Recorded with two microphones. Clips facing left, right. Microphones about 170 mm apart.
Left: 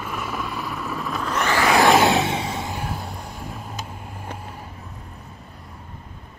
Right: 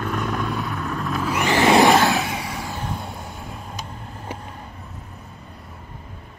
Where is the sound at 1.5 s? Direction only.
20° right (ahead or behind).